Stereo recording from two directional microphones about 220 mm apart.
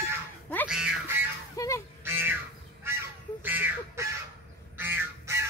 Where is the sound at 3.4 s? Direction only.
10° right (ahead or behind).